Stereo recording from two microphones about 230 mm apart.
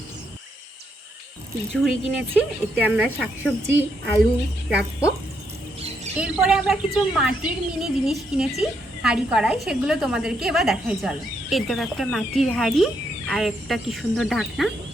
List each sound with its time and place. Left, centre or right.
1.7 s speech: centre
6.1 s speech: centre